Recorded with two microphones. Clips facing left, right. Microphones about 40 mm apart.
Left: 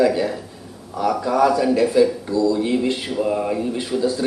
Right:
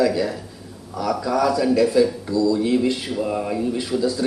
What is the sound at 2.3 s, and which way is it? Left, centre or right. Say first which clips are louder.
Speech: even; left.